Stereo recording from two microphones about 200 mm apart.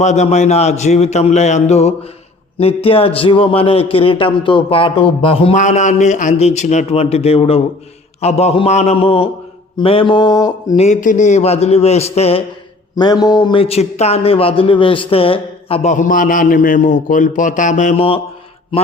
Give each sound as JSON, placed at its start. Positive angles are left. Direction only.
{"t": 0.0, "sound": "a man's voice", "side_deg": 35}
{"t": 10.8, "sound": "speech", "side_deg": 40}
{"t": 13.0, "sound": "speech", "side_deg": 20}